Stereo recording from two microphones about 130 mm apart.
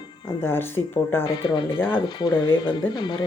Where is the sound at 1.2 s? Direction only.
40° left (ahead or behind).